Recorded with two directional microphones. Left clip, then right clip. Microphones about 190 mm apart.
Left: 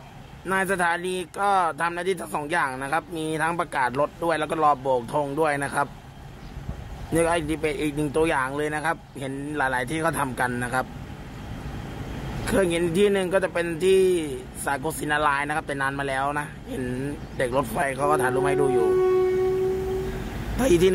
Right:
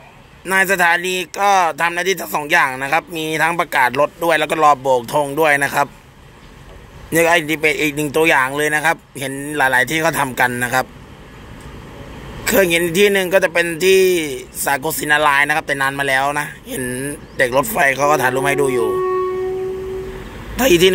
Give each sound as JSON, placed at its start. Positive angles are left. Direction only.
{"t": 0.5, "sound": "a man's voice", "side_deg": -25}
{"t": 7.2, "sound": "a man's voice", "side_deg": -25}
{"t": 12.4, "sound": "a man's voice", "side_deg": -30}
{"t": 20.5, "sound": "speech", "side_deg": -25}